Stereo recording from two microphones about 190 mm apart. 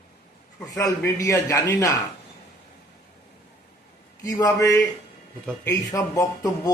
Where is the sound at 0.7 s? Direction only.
15° left (ahead or behind).